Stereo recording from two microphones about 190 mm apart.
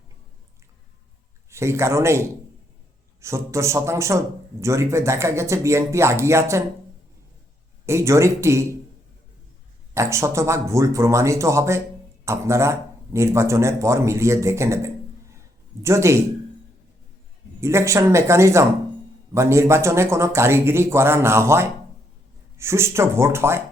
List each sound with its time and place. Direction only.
1.5 s a man's voice: 15° right (ahead or behind)
7.9 s a man's voice: 15° right (ahead or behind)
9.9 s a man's voice: 15° right (ahead or behind)
17.6 s a man's voice: 15° right (ahead or behind)